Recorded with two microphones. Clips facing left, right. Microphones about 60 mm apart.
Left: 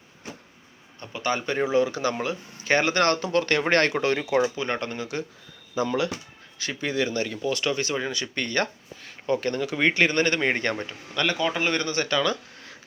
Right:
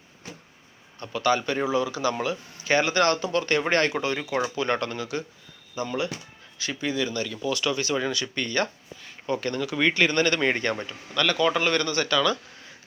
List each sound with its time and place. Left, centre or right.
0.9 s speech: left
1.7 s speech: left
4.5 s speech: left
5.8 s speech: left
6.6 s speech: left
7.4 s speech: left
8.4 s speech: left
9.2 s speech: left